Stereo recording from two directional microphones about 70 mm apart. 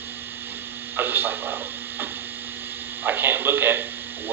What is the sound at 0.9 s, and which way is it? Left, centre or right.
Speech, right.